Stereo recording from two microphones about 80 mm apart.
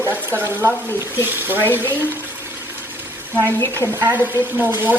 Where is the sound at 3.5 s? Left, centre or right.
Left.